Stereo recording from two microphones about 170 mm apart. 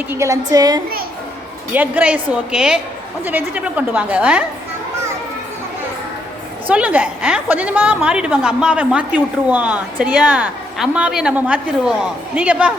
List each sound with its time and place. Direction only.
0.1 s a woman's voice: 20° right (ahead or behind)
1.7 s a woman's voice: 10° right (ahead or behind)
6.7 s a woman's voice: 10° right (ahead or behind)